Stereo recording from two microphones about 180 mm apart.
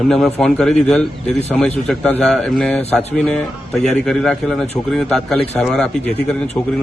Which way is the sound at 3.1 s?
5° left (ahead or behind).